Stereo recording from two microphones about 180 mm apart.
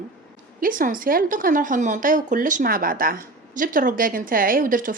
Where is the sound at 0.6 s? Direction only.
50° right (ahead or behind).